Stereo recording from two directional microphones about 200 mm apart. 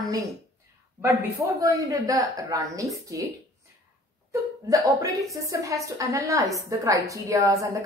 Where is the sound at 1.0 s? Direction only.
10° right (ahead or behind).